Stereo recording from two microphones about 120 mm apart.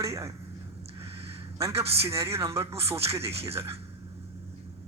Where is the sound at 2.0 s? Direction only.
25° right (ahead or behind).